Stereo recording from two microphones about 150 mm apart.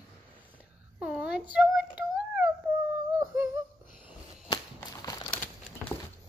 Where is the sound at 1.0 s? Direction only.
10° right (ahead or behind).